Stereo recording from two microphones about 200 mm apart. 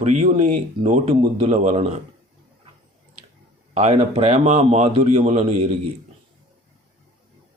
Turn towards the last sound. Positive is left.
turn(degrees=-35)  # may be behind; listen again after turning